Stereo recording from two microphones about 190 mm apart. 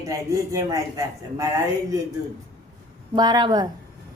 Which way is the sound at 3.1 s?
20° right (ahead or behind).